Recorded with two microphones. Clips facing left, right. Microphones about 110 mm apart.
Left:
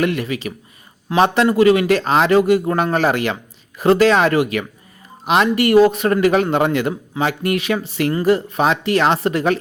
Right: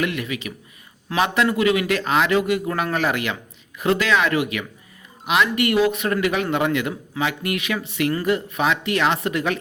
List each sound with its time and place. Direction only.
0.0 s a man's voice: 35° left (ahead or behind)